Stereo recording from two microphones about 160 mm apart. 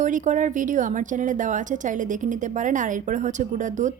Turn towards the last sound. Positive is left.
turn(degrees=-50)  # may be behind; listen again after turning